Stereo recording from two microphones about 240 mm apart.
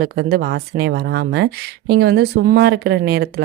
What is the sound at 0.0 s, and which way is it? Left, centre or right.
Speech, right.